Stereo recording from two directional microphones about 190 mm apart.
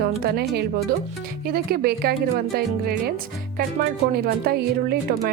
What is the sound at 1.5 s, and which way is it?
A woman's voice, 55° right (ahead or behind).